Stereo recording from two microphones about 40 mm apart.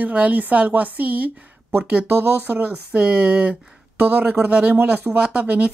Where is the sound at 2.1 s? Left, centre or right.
Right.